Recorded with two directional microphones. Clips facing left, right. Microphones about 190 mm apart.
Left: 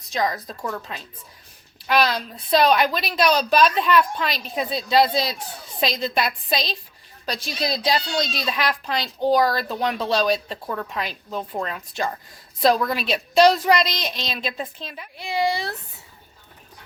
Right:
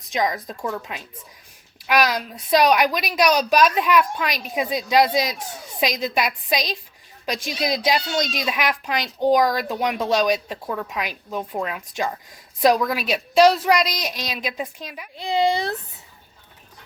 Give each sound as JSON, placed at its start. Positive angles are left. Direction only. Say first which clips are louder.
{"t": 0.1, "sound": "a child's voice", "louder": "right 1 dB", "side_deg": -20}